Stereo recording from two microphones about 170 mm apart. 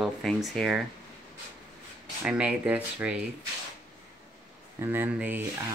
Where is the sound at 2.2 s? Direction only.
5° right (ahead or behind).